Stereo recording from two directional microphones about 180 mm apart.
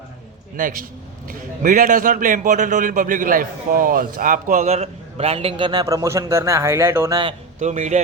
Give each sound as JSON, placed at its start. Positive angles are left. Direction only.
{"t": 0.5, "sound": "a man's voice", "side_deg": -50}
{"t": 7.6, "sound": "a man's voice", "side_deg": -40}